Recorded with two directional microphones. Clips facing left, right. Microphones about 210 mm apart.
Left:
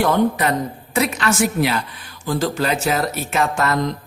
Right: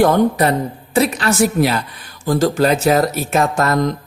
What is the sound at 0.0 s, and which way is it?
Speech, 40° right (ahead or behind).